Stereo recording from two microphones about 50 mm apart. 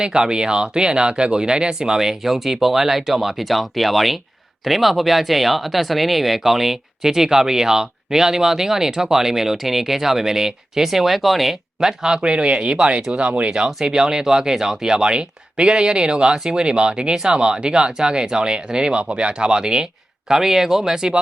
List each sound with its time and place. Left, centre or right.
0.0 s speech: centre
11.8 s speech: centre
13.1 s speech: right
13.8 s speech: centre